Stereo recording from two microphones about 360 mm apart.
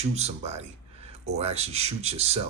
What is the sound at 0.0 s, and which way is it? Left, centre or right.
Speech, centre.